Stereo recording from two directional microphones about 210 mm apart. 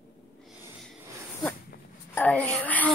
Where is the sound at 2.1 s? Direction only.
5° left (ahead or behind).